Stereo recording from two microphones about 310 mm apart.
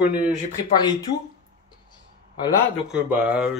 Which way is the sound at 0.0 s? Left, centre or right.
Centre.